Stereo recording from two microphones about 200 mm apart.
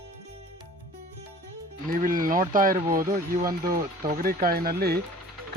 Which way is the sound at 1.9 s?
45° right (ahead or behind).